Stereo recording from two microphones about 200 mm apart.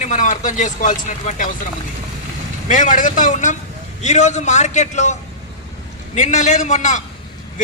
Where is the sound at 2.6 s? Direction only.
40° left (ahead or behind).